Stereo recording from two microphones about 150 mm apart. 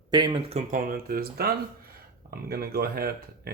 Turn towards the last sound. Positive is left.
turn(degrees=-90)